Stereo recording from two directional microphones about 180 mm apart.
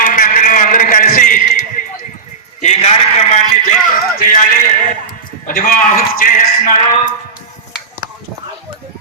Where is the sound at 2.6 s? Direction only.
40° left (ahead or behind).